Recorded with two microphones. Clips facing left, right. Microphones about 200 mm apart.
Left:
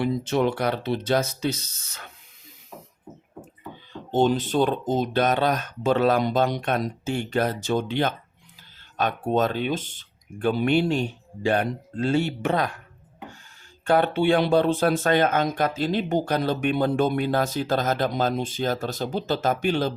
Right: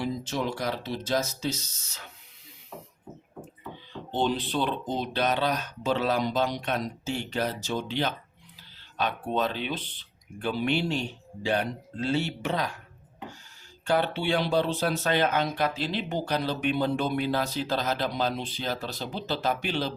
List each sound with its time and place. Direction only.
0.0 s speech: 60° left (ahead or behind)
4.1 s speech: 45° left (ahead or behind)
13.8 s speech: 50° left (ahead or behind)